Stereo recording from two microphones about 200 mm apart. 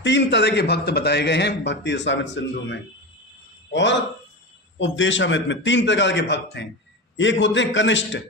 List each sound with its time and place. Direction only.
0.0 s a man's voice: 60° left (ahead or behind)